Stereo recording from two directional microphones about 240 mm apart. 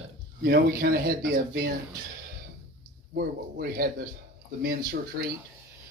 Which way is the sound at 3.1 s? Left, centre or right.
Right.